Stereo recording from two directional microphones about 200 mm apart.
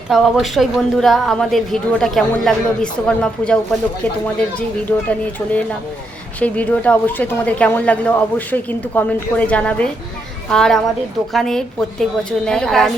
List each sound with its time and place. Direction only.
0.1 s a woman's voice: centre (ahead or behind)
4.9 s a woman's voice: 5° left (ahead or behind)